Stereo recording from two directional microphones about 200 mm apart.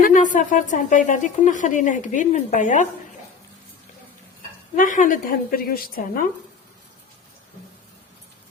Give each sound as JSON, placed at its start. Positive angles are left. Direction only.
{"t": 0.0, "sound": "a woman's voice", "side_deg": 40}
{"t": 4.8, "sound": "a woman's voice", "side_deg": 40}